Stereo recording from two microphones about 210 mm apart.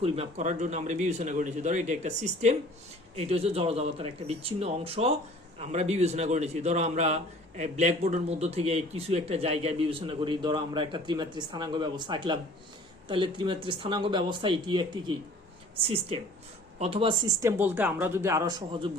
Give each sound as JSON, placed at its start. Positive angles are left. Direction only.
{"t": 0.0, "sound": "a man's voice", "side_deg": -30}
{"t": 16.7, "sound": "speech", "side_deg": -30}